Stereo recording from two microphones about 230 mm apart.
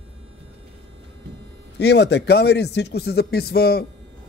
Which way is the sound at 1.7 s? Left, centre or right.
Left.